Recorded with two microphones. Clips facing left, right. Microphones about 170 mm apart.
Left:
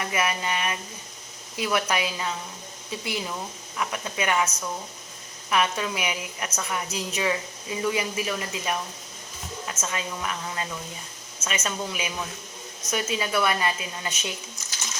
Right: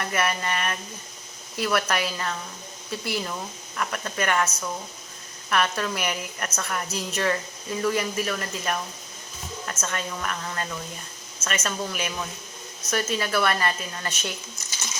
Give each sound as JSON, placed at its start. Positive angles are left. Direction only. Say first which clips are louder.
{"t": 0.0, "sound": "speech", "louder": "right 1 dB", "side_deg": 0}
{"t": 5.5, "sound": "a woman's voice", "louder": "even", "side_deg": 5}